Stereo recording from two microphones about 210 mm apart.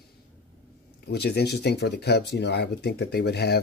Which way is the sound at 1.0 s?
50° left (ahead or behind).